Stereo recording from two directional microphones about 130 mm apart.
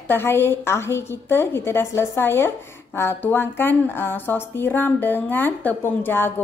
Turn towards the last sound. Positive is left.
turn(degrees=15)  # may be behind; listen again after turning